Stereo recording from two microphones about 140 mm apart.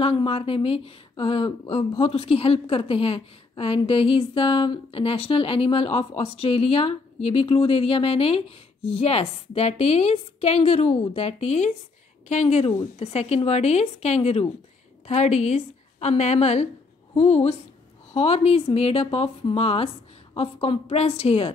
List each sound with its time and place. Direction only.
0.0 s a woman's voice: 40° left (ahead or behind)